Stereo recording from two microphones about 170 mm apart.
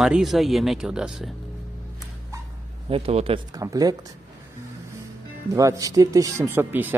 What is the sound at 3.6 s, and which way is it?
Speech, 20° right (ahead or behind).